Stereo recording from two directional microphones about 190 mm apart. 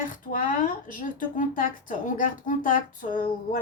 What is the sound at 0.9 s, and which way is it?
Speech, 45° left (ahead or behind).